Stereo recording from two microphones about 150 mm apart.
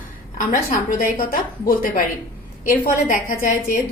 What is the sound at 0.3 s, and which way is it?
A woman's voice, 60° left (ahead or behind).